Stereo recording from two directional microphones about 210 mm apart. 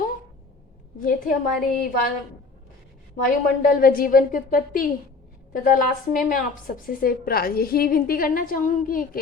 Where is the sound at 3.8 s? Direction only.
45° left (ahead or behind).